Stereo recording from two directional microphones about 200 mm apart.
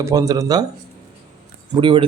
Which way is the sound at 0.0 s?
15° right (ahead or behind).